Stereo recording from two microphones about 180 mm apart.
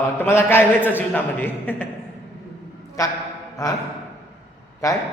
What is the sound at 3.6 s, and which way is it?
Speech, 20° left (ahead or behind).